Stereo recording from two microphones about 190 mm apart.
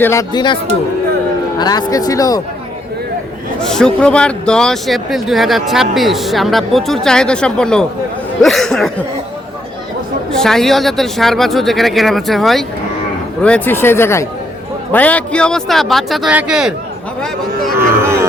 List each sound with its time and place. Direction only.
0.0 s speech: 15° left (ahead or behind)
3.6 s speech: 5° left (ahead or behind)
10.3 s speech: centre (ahead or behind)
17.7 s music: 15° right (ahead or behind)